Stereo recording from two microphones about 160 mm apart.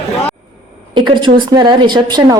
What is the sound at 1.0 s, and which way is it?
A woman's voice, 30° right (ahead or behind).